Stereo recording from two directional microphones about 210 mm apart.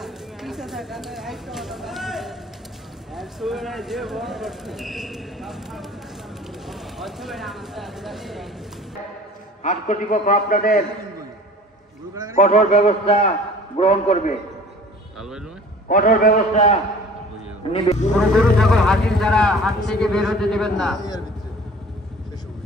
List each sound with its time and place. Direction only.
0.0 s a sound: centre (ahead or behind)
3.2 s speech: centre (ahead or behind)
9.6 s a man's voice: 35° left (ahead or behind)
12.4 s a man's voice: 30° left (ahead or behind)
15.1 s speech: centre (ahead or behind)
15.9 s a man's voice: 40° left (ahead or behind)
18.4 s speech: centre (ahead or behind)